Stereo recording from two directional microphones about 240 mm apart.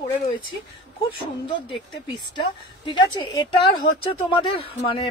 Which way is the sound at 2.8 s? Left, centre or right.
Centre.